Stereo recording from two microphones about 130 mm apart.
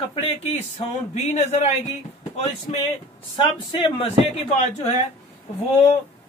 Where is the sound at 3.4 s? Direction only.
35° left (ahead or behind).